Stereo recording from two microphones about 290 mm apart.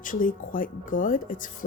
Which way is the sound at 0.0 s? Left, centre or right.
Left.